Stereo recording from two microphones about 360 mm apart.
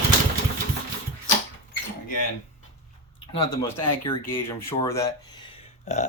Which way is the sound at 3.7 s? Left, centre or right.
Left.